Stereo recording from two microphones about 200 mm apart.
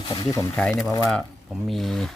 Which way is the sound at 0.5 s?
5° left (ahead or behind).